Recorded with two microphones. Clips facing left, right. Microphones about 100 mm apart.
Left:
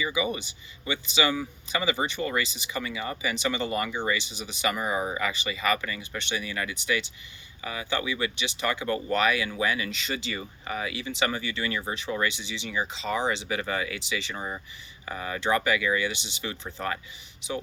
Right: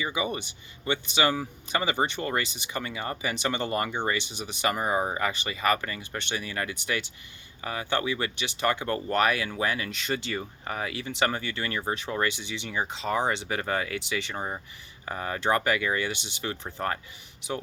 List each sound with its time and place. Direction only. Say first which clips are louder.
0.0 s speech: left 1 dB; 50° right (ahead or behind)
14.3 s speech: right 1 dB; 35° right (ahead or behind)